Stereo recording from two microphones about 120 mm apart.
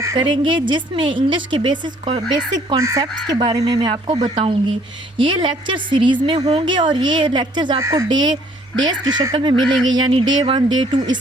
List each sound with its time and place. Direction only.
0.2 s a woman's voice: 40° right (ahead or behind)
2.5 s a woman's voice: 30° right (ahead or behind); by 6.7 s 55° right (ahead or behind)
6.7 s speech: 40° right (ahead or behind)
7.8 s speech: 25° right (ahead or behind)
8.1 s a woman's voice: 35° right (ahead or behind)
9.6 s speech: 5° left (ahead or behind)
9.8 s speech: 40° right (ahead or behind)